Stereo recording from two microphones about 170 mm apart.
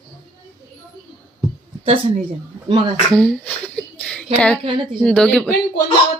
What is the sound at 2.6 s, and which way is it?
Speech, 25° right (ahead or behind).